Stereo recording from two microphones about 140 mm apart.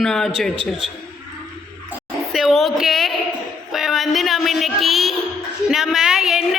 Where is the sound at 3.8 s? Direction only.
Centre (ahead or behind).